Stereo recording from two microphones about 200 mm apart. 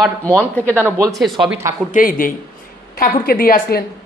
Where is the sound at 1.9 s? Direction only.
45° left (ahead or behind).